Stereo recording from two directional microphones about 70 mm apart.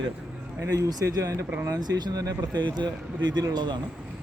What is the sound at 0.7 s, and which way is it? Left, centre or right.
Speech, right.